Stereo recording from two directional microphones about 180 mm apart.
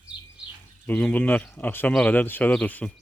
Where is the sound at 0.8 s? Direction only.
10° left (ahead or behind).